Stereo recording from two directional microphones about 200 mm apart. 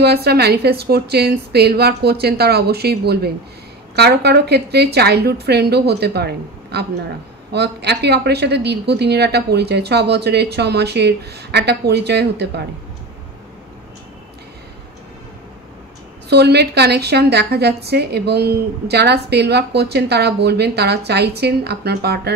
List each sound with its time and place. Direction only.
0.0 s a woman's voice: 55° right (ahead or behind)
16.3 s a woman's voice: 55° right (ahead or behind)